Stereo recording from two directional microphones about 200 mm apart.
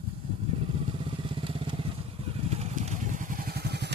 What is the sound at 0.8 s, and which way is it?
Motorcycle, 25° right (ahead or behind).